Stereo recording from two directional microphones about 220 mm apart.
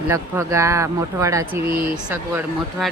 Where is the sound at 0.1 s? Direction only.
15° right (ahead or behind).